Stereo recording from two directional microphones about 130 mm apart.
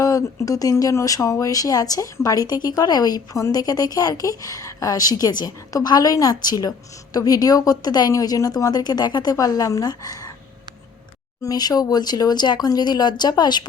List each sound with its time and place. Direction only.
0.0 s speech: 25° left (ahead or behind)
11.4 s speech: 30° left (ahead or behind)